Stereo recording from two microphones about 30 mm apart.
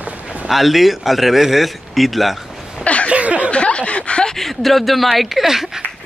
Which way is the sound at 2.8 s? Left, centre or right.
Left.